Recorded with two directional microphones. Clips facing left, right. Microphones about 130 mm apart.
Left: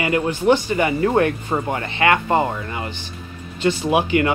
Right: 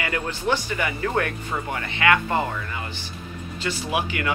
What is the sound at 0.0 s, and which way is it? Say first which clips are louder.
Speech: left 8 dB; 20° left (ahead or behind).